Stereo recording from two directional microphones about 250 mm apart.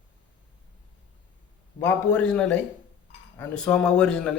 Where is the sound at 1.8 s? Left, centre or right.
Centre.